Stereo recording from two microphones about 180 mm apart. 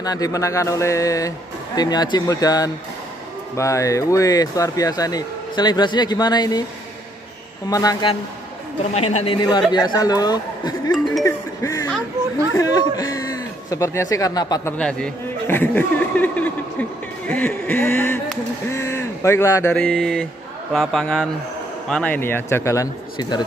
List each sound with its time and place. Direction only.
0.0 s a man's voice: 20° left (ahead or behind)
7.7 s speech: 20° left (ahead or behind)
8.9 s a man's voice: 35° left (ahead or behind)
11.2 s music: 15° left (ahead or behind)
12.5 s a sound: 20° left (ahead or behind)
14.8 s a man's voice: 5° left (ahead or behind)
17.3 s a sound: 5° left (ahead or behind)
19.7 s mantra: 5° left (ahead or behind)
21.8 s a man's voice: 5° left (ahead or behind)